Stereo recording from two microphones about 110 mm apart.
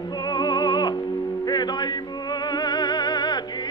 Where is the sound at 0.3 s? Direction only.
40° left (ahead or behind).